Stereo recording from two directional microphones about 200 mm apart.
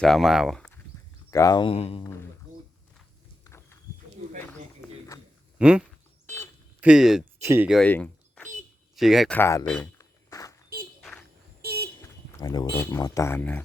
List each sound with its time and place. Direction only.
0.0 s speech: centre (ahead or behind)
1.3 s speech: 20° left (ahead or behind)
3.4 s walk: 15° left (ahead or behind)
5.5 s speech: 5° right (ahead or behind)
7.4 s speech: 15° right (ahead or behind)
7.7 s a sound: 5° left (ahead or behind)
9.0 s speech: centre (ahead or behind)
9.4 s speech: 15° left (ahead or behind)
9.6 s speech: 5° left (ahead or behind)
10.0 s a sound: 15° left (ahead or behind)
11.6 s vehicle: 50° right (ahead or behind)
12.0 s a sound: 20° left (ahead or behind)
12.7 s speech: 10° left (ahead or behind)